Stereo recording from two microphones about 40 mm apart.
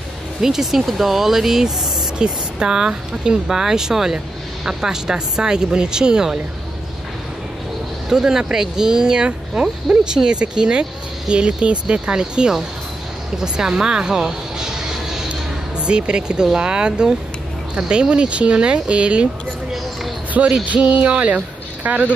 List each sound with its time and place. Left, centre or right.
0.4 s speech: centre
2.1 s speech: right
8.1 s speech: centre
13.4 s a sound: centre
15.8 s speech: right
20.6 s a sound: right